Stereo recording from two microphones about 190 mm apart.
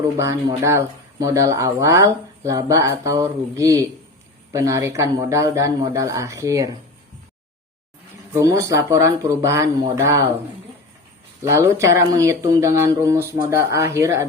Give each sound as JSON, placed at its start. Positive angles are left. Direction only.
{"t": 0.2, "sound": "speech", "side_deg": -15}
{"t": 8.3, "sound": "speech", "side_deg": -15}
{"t": 11.4, "sound": "speech", "side_deg": -15}